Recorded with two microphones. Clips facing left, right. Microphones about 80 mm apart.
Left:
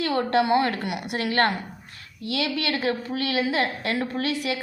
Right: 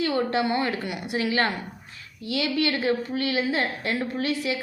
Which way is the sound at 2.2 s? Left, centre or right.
Left.